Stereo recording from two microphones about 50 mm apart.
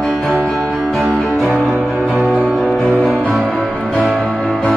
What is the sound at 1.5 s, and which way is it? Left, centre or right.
Music, right.